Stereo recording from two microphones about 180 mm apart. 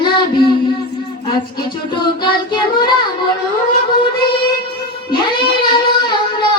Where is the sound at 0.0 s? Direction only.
25° left (ahead or behind).